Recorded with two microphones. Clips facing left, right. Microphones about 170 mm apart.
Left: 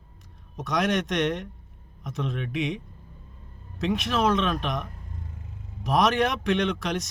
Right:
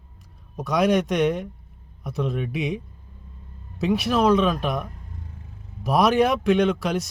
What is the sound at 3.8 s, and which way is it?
Speech, centre (ahead or behind).